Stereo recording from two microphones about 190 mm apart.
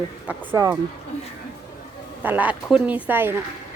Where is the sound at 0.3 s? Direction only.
10° right (ahead or behind).